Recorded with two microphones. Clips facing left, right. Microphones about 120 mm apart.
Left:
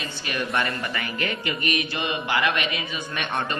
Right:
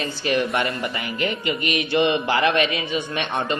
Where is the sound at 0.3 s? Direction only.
25° right (ahead or behind).